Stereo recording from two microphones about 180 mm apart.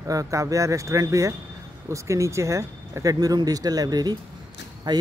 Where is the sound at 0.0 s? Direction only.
20° right (ahead or behind).